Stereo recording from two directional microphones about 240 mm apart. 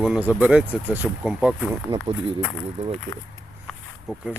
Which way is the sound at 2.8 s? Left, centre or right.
Right.